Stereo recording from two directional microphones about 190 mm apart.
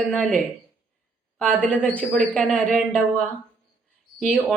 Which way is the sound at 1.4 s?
5° left (ahead or behind).